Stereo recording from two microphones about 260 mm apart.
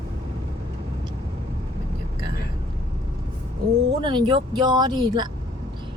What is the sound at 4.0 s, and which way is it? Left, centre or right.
Speech, centre.